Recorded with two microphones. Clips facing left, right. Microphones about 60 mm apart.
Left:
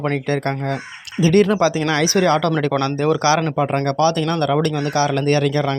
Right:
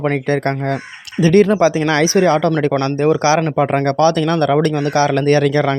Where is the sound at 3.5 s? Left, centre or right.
Right.